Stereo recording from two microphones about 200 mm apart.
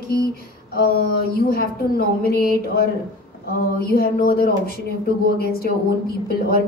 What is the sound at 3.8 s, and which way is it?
A woman's voice, 50° left (ahead or behind).